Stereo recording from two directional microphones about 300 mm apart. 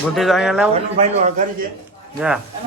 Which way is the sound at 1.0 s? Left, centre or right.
Right.